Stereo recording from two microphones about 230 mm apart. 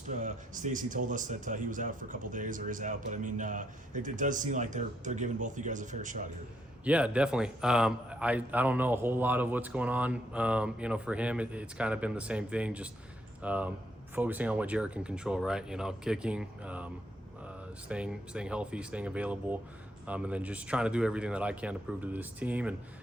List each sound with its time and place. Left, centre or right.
0.1 s speech: right
6.8 s a man's voice: centre